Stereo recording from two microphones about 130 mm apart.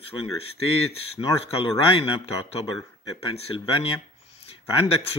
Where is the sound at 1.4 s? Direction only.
45° left (ahead or behind).